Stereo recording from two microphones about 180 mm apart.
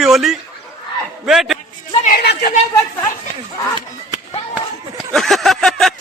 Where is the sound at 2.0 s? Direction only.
60° left (ahead or behind).